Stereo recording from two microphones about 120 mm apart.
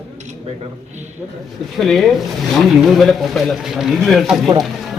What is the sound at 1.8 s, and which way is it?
Speech, centre (ahead or behind).